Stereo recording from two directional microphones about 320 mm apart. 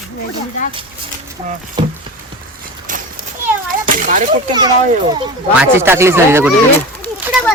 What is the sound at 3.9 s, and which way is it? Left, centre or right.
Speech, right.